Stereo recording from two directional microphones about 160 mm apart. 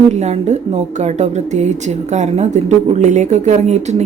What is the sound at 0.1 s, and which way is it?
A woman's voice, 45° right (ahead or behind).